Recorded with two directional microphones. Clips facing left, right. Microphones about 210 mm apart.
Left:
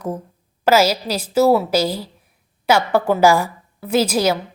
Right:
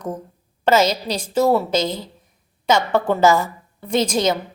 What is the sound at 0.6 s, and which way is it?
A woman's voice, 5° left (ahead or behind).